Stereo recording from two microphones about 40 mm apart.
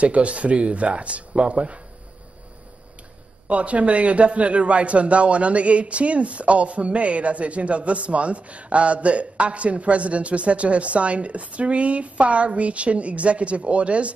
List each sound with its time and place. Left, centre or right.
0.0 s a man's voice: right
3.4 s a man's voice: right